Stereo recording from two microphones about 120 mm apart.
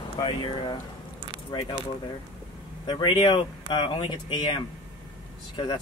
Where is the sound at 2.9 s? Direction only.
40° left (ahead or behind).